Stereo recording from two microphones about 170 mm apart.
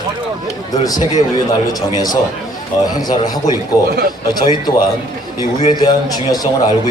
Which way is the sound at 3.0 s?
25° left (ahead or behind).